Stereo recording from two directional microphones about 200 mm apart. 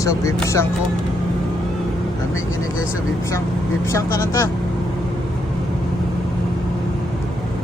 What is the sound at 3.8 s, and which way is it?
Speech, 15° left (ahead or behind).